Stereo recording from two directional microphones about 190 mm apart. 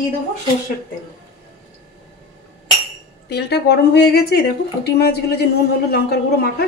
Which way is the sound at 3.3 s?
60° left (ahead or behind).